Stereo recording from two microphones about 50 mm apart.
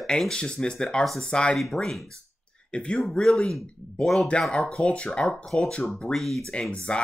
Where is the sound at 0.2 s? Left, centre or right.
Centre.